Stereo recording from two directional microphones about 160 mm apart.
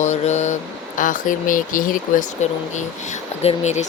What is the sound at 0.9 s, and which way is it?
Speech, 55° left (ahead or behind).